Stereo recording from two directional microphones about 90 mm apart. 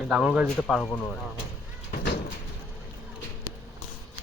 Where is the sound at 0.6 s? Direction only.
5° left (ahead or behind).